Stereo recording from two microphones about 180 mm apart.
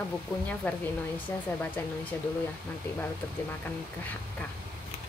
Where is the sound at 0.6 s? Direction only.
10° left (ahead or behind).